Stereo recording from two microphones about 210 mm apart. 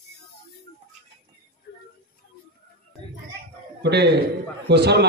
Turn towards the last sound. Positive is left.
turn(degrees=-50)  # may be behind; listen again after turning